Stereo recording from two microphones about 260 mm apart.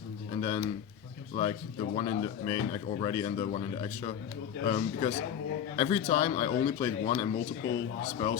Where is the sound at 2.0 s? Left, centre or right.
Centre.